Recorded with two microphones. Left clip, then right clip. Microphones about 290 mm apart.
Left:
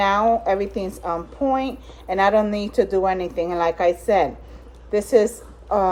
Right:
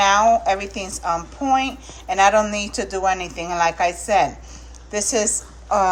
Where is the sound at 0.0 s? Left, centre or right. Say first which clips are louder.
Right 3 dB; centre.